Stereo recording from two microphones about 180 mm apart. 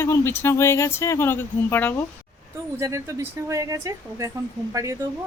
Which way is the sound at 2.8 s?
15° right (ahead or behind).